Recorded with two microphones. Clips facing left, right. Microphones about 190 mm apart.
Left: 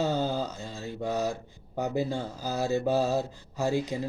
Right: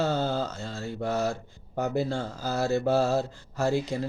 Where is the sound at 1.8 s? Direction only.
15° left (ahead or behind).